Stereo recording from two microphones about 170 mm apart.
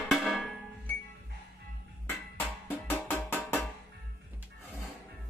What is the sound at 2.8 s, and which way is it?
Music, 10° left (ahead or behind).